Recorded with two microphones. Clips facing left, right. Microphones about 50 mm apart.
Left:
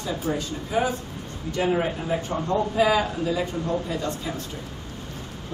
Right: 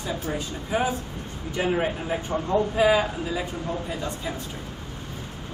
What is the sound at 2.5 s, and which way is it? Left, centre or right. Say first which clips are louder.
Speech: right 1 dB; centre.